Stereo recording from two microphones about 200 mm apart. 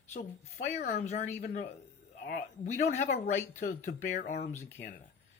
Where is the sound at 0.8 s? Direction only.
40° left (ahead or behind).